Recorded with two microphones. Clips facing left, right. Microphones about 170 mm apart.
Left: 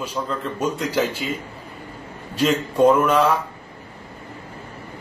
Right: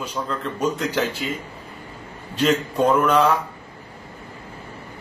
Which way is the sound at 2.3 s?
10° left (ahead or behind).